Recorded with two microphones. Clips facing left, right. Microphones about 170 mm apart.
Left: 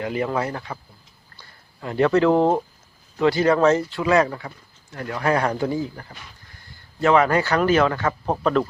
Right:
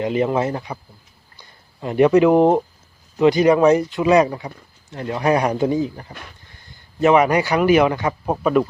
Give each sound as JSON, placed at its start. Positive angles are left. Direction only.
{"t": 0.0, "sound": "a man's voice", "side_deg": -20}